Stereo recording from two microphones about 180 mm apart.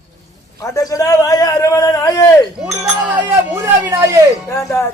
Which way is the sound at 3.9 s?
15° right (ahead or behind).